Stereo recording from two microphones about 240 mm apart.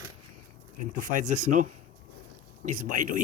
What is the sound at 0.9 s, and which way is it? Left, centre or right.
Speech, right.